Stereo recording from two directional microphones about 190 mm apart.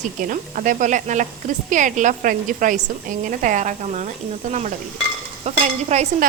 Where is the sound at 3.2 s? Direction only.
45° right (ahead or behind).